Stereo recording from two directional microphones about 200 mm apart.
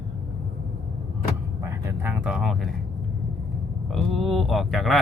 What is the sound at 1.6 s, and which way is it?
Speech, 15° right (ahead or behind).